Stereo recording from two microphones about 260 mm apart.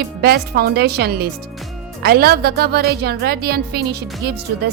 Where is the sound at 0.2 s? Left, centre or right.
Right.